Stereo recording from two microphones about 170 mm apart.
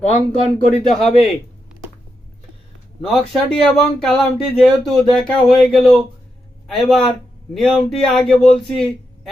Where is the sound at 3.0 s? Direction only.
5° left (ahead or behind).